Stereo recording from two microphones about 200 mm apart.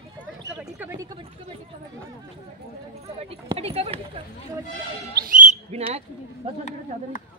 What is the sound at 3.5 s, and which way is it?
Speech, 30° right (ahead or behind).